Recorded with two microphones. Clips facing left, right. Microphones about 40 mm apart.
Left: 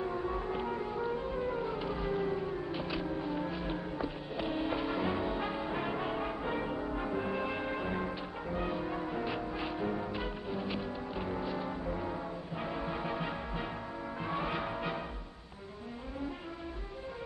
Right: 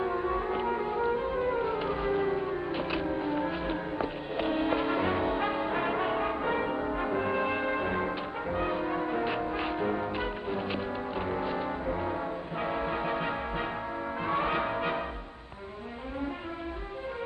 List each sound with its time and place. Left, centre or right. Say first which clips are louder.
0.0 s music: right 5 dB; right
14.2 s brass instrument: right 6 dB; right